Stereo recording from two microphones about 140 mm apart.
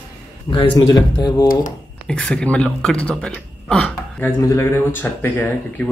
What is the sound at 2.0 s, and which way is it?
Speech, 5° left (ahead or behind).